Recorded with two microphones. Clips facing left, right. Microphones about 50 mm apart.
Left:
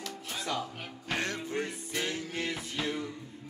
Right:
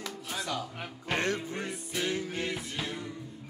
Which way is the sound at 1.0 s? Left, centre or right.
Centre.